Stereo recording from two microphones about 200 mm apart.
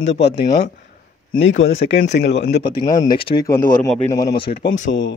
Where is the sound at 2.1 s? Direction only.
60° left (ahead or behind).